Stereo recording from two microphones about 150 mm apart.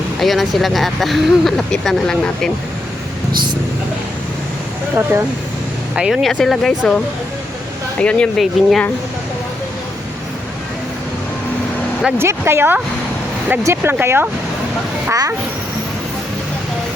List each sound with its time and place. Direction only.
0.2 s speech: centre (ahead or behind)
5.9 s speech: 5° right (ahead or behind)
12.1 s speech: 15° right (ahead or behind)